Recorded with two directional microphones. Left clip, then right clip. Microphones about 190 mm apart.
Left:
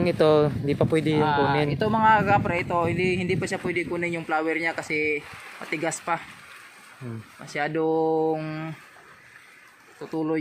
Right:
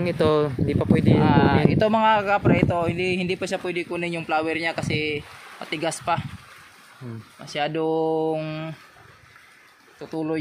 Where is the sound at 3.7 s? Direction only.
70° right (ahead or behind).